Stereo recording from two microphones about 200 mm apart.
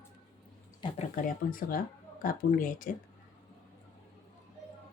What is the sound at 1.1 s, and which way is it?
Speech, 40° left (ahead or behind).